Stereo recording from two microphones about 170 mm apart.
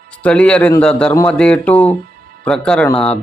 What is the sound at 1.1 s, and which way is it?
A man's voice, 15° left (ahead or behind).